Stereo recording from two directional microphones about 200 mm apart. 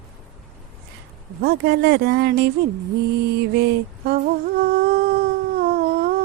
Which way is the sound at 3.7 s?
55° right (ahead or behind).